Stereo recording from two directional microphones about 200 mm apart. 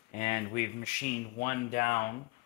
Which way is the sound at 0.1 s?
40° left (ahead or behind).